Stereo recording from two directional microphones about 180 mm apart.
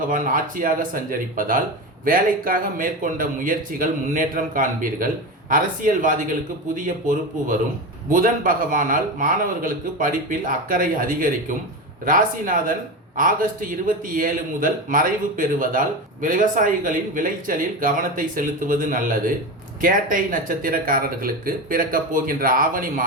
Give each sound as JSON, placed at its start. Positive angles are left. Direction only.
{"t": 0.1, "sound": "speech", "side_deg": -50}